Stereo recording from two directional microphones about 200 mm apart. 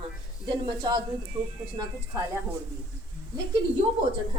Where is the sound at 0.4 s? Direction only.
20° right (ahead or behind).